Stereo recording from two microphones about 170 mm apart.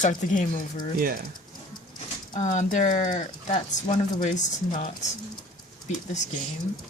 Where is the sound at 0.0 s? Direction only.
50° left (ahead or behind).